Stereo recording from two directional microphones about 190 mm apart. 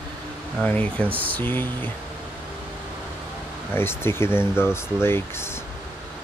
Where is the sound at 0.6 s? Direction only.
10° left (ahead or behind).